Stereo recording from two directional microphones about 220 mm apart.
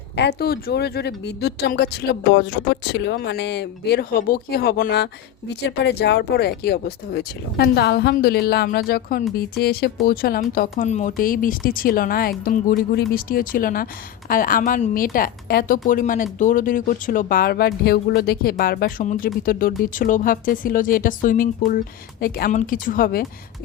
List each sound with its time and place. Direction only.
0.2 s a woman's voice: 45° left (ahead or behind)